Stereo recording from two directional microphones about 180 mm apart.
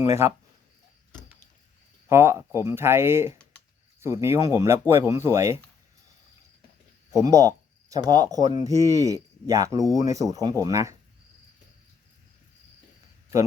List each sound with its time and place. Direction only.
0.0 s speech: 15° right (ahead or behind)
2.0 s speech: 15° right (ahead or behind)
7.1 s speech: 20° right (ahead or behind)